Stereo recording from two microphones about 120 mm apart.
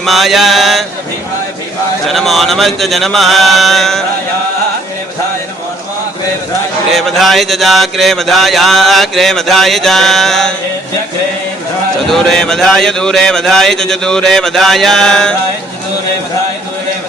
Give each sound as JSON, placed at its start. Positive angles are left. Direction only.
{"t": 0.0, "sound": "mantra", "side_deg": 0}
{"t": 2.0, "sound": "mantra", "side_deg": 0}
{"t": 6.9, "sound": "mantra", "side_deg": 0}
{"t": 12.1, "sound": "mantra", "side_deg": 5}